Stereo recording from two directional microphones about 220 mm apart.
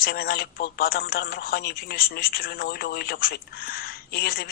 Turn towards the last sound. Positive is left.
turn(degrees=45)  # may be behind; listen again after turning